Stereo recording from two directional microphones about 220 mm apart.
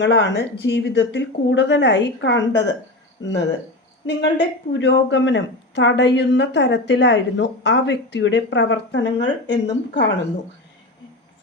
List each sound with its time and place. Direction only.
0.0 s speech: 55° left (ahead or behind)
4.0 s a woman's voice: 55° left (ahead or behind)